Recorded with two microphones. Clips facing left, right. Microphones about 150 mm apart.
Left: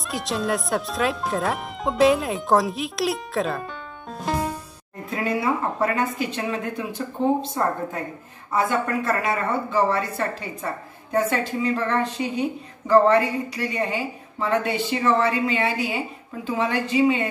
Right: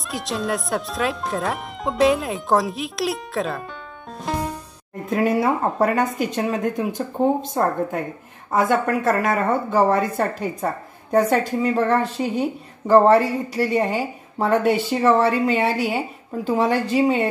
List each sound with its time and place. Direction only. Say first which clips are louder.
0.1 s speech: even; centre (ahead or behind)
4.2 s music: even; centre (ahead or behind)
5.1 s speech: right 5 dB; 45° right (ahead or behind)
8.5 s speech: right 4 dB; 45° right (ahead or behind)